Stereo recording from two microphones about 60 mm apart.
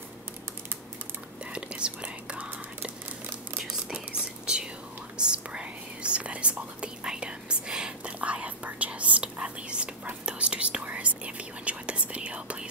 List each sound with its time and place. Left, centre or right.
1.4 s whispering: centre